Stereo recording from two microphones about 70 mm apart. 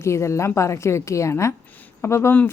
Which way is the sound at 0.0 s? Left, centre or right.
Left.